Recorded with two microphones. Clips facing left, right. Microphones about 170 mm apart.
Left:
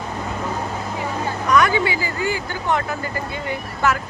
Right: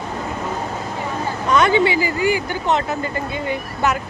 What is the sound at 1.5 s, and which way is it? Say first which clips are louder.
Speech: right 3 dB; 25° right (ahead or behind).